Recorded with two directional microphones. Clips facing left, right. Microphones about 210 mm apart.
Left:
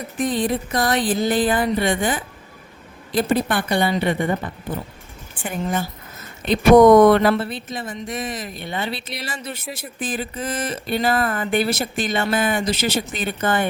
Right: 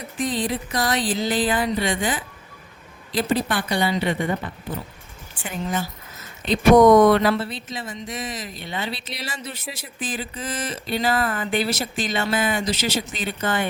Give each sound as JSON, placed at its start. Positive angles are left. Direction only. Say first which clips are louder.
{"t": 0.2, "sound": "a woman's voice", "louder": "left 3 dB", "side_deg": 55}
{"t": 5.3, "sound": "speech", "louder": "left 3 dB", "side_deg": 55}